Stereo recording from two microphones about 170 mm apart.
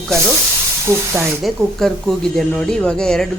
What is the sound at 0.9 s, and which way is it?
Speech, 15° right (ahead or behind).